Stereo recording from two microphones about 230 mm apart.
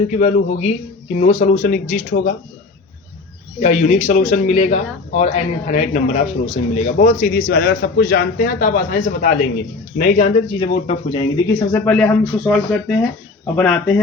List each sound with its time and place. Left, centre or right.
0.1 s a man's voice: left
3.6 s a man's voice: left
11.7 s speech: centre